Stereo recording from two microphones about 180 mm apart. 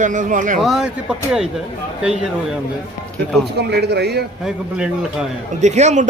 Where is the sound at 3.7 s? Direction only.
65° right (ahead or behind).